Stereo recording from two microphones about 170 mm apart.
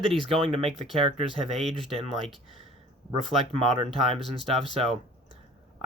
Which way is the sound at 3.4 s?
35° right (ahead or behind).